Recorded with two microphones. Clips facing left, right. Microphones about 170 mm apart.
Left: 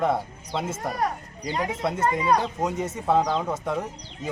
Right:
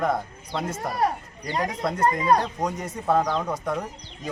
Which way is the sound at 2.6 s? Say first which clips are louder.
Left 1 dB; 25° left (ahead or behind).